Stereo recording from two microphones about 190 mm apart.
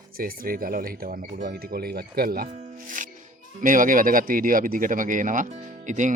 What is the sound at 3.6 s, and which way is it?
Speech, 45° right (ahead or behind).